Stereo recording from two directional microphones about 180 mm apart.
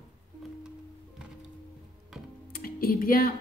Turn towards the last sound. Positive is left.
turn(degrees=50)  # may be behind; listen again after turning